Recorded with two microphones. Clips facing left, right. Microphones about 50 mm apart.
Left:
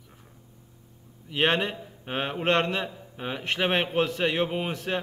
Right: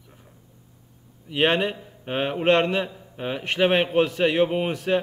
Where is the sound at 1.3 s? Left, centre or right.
Centre.